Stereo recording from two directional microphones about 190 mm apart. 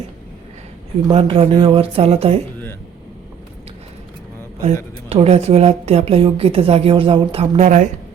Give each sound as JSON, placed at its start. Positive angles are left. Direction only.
{"t": 1.0, "sound": "a woman's voice", "side_deg": -30}
{"t": 5.0, "sound": "a woman's voice", "side_deg": -35}